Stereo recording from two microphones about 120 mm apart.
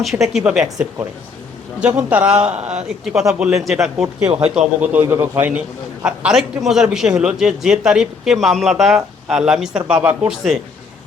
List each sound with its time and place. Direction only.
0.0 s a man's voice: centre (ahead or behind)
1.8 s a man's voice: 10° right (ahead or behind)